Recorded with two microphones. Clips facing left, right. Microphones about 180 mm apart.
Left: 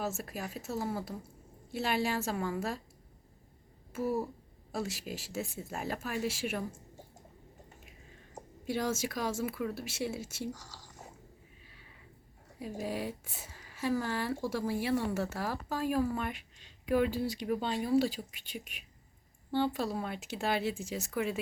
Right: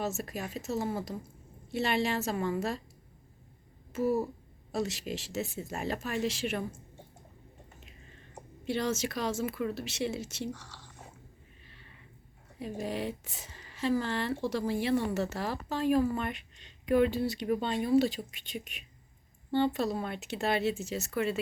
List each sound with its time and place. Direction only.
0.3 s speech: 5° left (ahead or behind)
3.9 s speech: 10° left (ahead or behind)
5.5 s speech: 75° right (ahead or behind)
5.7 s speech: 10° left (ahead or behind)
8.6 s speech: 10° left (ahead or behind)
10.5 s squish: 40° left (ahead or behind)
11.6 s a sound: 5° left (ahead or behind)
12.7 s speech: 10° left (ahead or behind)